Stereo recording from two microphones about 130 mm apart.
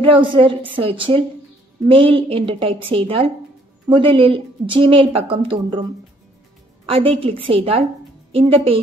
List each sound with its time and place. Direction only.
0.0 s a woman's voice: 40° right (ahead or behind)
6.9 s a woman's voice: 45° right (ahead or behind)